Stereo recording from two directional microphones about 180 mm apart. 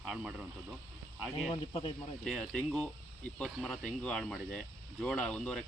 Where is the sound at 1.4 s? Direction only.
30° left (ahead or behind).